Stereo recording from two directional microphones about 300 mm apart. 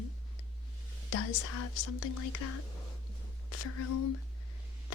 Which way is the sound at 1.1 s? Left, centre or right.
Left.